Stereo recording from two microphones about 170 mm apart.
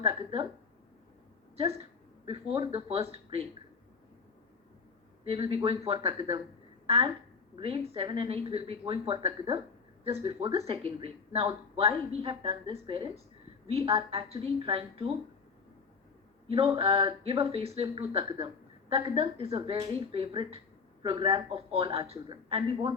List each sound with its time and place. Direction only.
0.0 s a woman's voice: 30° right (ahead or behind)
2.2 s speech: 35° right (ahead or behind)
5.2 s speech: 35° right (ahead or behind)
7.5 s a woman's voice: 35° right (ahead or behind)
16.5 s speech: 30° right (ahead or behind)